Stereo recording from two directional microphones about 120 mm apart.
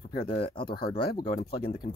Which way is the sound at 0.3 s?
45° left (ahead or behind).